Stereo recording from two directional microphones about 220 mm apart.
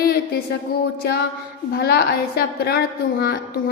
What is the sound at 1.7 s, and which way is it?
A woman's voice, 45° left (ahead or behind).